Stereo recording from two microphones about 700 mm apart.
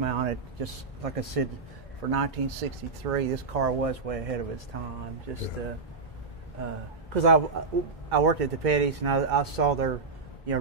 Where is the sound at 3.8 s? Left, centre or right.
Right.